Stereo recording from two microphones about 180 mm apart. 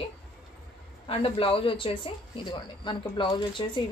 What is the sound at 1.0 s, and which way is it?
A woman's voice, 30° left (ahead or behind).